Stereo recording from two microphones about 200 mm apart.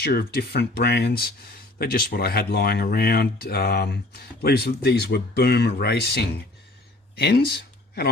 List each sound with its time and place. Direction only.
0.0 s speech: 50° left (ahead or behind)